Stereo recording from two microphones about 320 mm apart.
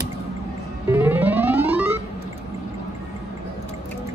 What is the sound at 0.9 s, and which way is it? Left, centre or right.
Music, centre.